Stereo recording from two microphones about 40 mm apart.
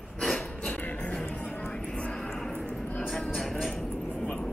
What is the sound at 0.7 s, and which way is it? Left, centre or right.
Music, left.